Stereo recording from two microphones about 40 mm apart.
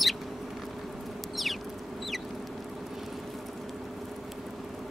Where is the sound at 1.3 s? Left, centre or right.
Centre.